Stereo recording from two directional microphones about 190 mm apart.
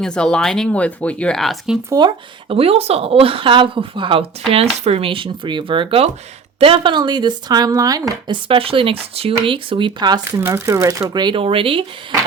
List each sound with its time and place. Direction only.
0.0 s speech: 5° left (ahead or behind)
1.9 s speech: 25° right (ahead or behind)